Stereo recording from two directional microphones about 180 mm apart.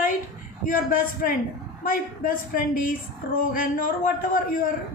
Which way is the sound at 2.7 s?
50° left (ahead or behind).